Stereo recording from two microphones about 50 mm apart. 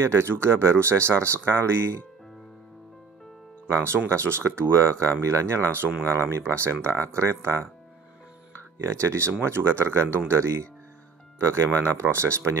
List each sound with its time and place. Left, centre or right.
0.0 s speech: right
3.6 s speech: right
5.2 s speech: right
6.0 s speech: right
8.7 s speech: right